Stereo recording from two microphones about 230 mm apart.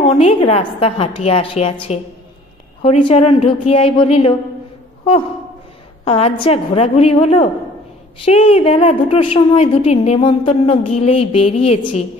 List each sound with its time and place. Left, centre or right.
0.0 s a woman's voice: left
6.0 s a woman's voice: left